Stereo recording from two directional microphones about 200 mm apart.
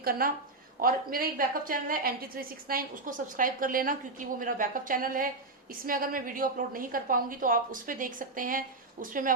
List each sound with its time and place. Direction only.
0.0 s a woman's voice: 45° right (ahead or behind)